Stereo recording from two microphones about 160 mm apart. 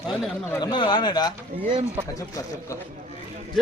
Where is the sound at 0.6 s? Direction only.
30° left (ahead or behind).